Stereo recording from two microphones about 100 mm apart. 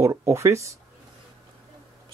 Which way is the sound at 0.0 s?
30° right (ahead or behind).